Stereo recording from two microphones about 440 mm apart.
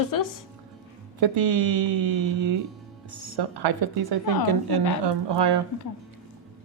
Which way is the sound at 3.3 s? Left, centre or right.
Right.